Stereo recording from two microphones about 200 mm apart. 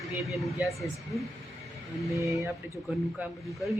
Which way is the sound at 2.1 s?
15° right (ahead or behind).